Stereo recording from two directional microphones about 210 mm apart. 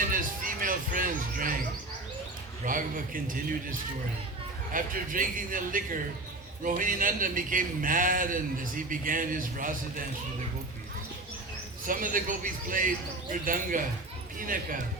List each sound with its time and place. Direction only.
0.1 s a sound: 40° right (ahead or behind)
2.6 s a man's voice: 40° right (ahead or behind)
11.9 s a man's voice: 40° right (ahead or behind)